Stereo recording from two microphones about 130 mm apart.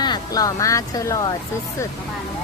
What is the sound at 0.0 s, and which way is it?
Speech, 30° left (ahead or behind).